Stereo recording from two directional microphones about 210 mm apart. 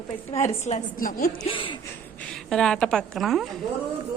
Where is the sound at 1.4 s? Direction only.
25° left (ahead or behind).